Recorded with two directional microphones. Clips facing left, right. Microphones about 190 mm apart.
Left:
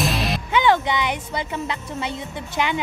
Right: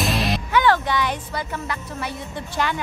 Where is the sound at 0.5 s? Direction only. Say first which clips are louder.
Left 1 dB; 20° left (ahead or behind).